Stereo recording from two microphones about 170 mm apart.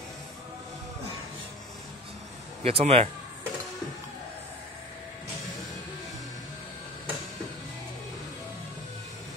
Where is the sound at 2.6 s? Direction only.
35° right (ahead or behind).